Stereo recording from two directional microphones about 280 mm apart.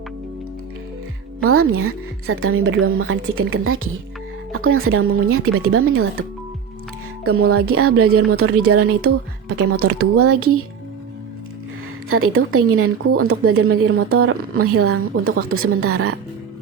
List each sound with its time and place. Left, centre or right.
1.5 s speech: right
7.3 s speech: right
12.0 s speech: right